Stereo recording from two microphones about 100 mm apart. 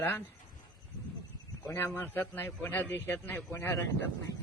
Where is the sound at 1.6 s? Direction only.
20° left (ahead or behind).